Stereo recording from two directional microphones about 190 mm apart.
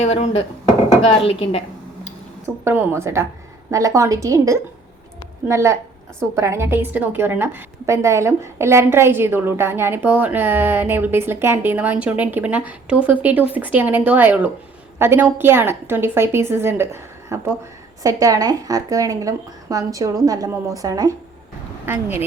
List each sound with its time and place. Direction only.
0.0 s a woman's voice: 35° left (ahead or behind)
2.6 s a woman's voice: 15° right (ahead or behind)